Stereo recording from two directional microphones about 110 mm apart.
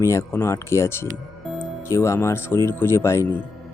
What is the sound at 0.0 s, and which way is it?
Speech, 25° left (ahead or behind).